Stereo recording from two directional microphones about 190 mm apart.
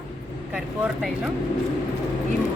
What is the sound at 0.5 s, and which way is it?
Speech, 5° right (ahead or behind).